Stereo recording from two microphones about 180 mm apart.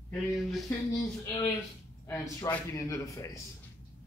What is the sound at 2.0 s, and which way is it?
A man's voice, 15° left (ahead or behind).